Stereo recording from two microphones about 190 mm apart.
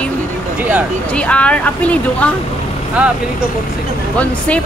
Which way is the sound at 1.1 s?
5° left (ahead or behind).